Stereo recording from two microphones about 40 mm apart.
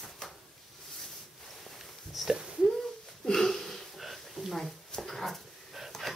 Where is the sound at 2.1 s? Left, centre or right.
Centre.